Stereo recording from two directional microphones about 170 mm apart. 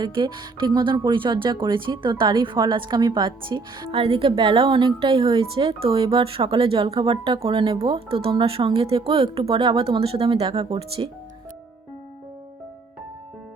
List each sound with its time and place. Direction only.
0.0 s a woman's voice: 30° right (ahead or behind)